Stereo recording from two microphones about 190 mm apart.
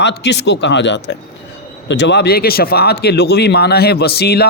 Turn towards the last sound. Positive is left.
turn(degrees=55)  # may be behind; listen again after turning